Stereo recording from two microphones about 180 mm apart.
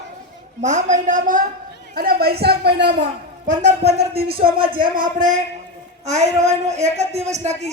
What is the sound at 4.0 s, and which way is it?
Speech, 60° right (ahead or behind).